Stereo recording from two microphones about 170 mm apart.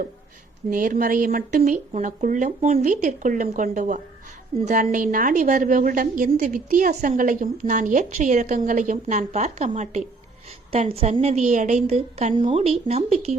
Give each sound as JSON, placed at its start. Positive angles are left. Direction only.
{"t": 0.7, "sound": "a woman's voice", "side_deg": -55}